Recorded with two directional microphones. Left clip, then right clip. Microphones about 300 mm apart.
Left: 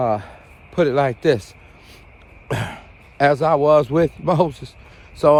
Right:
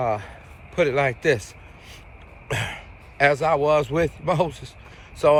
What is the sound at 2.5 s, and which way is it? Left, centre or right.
A man's voice, centre.